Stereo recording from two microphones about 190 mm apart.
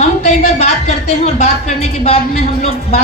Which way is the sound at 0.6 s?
35° left (ahead or behind).